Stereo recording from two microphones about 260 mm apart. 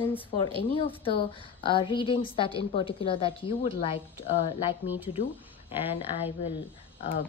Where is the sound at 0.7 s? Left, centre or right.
Centre.